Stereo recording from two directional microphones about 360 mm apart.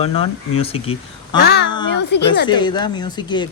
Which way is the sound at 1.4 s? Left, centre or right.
Left.